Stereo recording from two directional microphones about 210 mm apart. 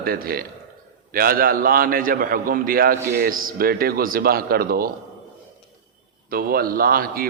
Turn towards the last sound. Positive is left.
turn(degrees=-45)  # may be behind; listen again after turning